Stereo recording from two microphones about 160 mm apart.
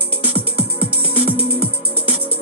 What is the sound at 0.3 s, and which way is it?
Music, 35° right (ahead or behind).